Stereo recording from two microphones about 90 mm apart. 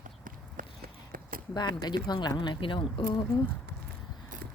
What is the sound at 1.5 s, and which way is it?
Speech, 55° left (ahead or behind).